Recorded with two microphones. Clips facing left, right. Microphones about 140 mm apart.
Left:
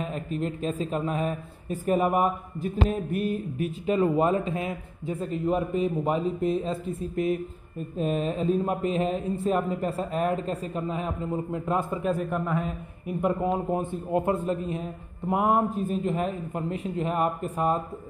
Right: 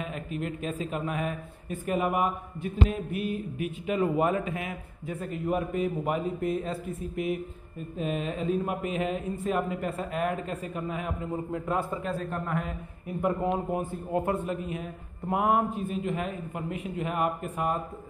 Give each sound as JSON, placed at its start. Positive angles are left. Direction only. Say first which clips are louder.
{"t": 0.0, "sound": "a man's voice", "louder": "left 4 dB", "side_deg": 35}
{"t": 7.0, "sound": "a man's voice", "louder": "left 5 dB", "side_deg": 35}
{"t": 13.7, "sound": "a man's voice", "louder": "left 3 dB", "side_deg": 25}
{"t": 15.7, "sound": "a man's voice", "louder": "left 3 dB", "side_deg": 40}